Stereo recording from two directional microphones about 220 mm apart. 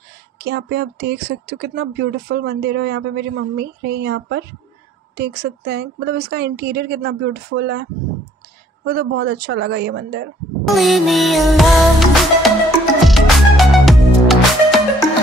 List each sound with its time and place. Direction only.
0.4 s speech: 50° right (ahead or behind)
8.8 s speech: 50° right (ahead or behind)
10.7 s music: centre (ahead or behind)